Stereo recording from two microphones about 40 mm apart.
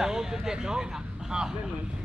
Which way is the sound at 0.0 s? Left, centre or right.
Centre.